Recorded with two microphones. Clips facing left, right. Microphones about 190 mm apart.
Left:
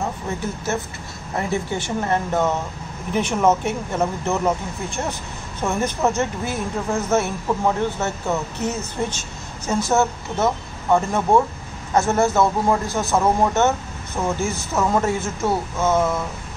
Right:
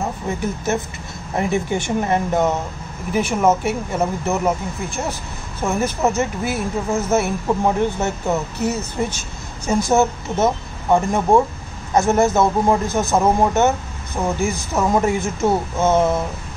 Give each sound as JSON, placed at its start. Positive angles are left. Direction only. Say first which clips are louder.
{"t": 1.3, "sound": "a man's voice", "louder": "right 3 dB", "side_deg": -15}
{"t": 3.1, "sound": "a man's voice", "louder": "right 1 dB", "side_deg": -5}
{"t": 5.6, "sound": "a man's voice", "louder": "right 2 dB", "side_deg": -5}